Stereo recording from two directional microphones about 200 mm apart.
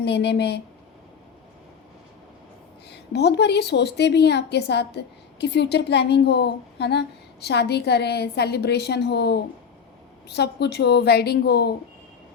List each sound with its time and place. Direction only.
0.0 s a woman's voice: 55° left (ahead or behind)
2.9 s a woman's voice: 55° left (ahead or behind)